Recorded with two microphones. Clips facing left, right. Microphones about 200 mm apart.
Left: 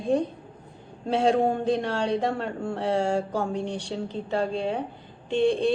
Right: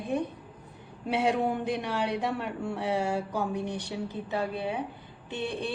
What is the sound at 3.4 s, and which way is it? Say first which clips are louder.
Speech: left 3 dB; 25° left (ahead or behind).